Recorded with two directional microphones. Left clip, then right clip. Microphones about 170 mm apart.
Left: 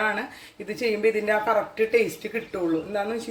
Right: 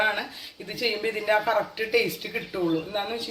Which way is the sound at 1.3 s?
40° left (ahead or behind).